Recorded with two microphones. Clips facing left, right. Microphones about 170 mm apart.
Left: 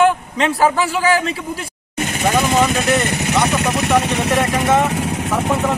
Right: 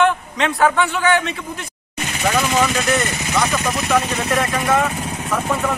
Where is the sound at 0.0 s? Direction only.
30° left (ahead or behind).